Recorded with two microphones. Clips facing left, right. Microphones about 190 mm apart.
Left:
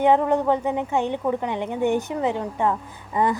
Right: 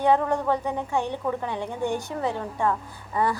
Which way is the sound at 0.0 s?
20° left (ahead or behind).